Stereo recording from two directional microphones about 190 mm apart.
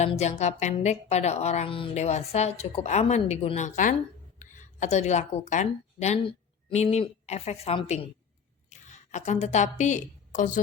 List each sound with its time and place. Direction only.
0.0 s a woman's voice: 35° left (ahead or behind)